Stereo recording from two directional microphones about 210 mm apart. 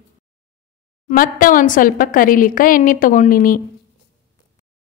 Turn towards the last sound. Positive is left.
turn(degrees=40)  # may be behind; listen again after turning